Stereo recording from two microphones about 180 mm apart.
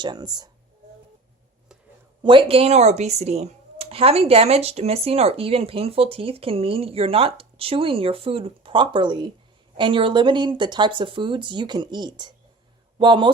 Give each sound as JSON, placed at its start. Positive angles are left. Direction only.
{"t": 0.0, "sound": "speech", "side_deg": -20}
{"t": 2.2, "sound": "speech", "side_deg": -30}